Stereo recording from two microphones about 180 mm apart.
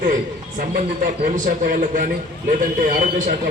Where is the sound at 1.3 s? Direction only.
45° right (ahead or behind).